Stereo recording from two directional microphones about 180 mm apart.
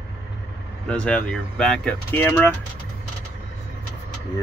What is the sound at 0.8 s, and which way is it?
Speech, 5° left (ahead or behind).